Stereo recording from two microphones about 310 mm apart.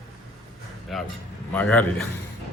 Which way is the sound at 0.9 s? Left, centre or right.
Centre.